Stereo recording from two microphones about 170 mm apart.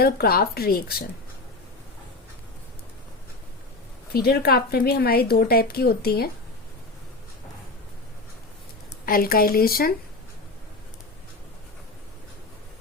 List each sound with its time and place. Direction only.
0.0 s a woman's voice: 65° left (ahead or behind)
4.1 s a woman's voice: 65° left (ahead or behind)
9.0 s a woman's voice: 60° left (ahead or behind)